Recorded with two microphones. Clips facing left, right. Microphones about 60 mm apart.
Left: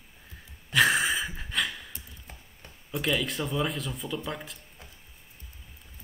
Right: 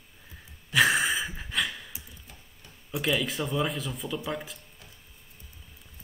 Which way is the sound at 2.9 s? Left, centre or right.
Centre.